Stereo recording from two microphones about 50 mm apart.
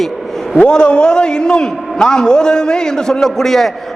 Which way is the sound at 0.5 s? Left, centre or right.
Left.